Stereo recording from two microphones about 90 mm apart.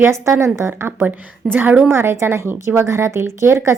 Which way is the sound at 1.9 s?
30° right (ahead or behind).